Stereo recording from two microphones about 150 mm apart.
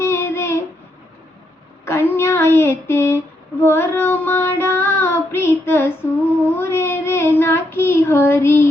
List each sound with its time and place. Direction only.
0.0 s a sound: 15° left (ahead or behind)
1.8 s female singing: 15° left (ahead or behind)
3.6 s child singing: 15° left (ahead or behind)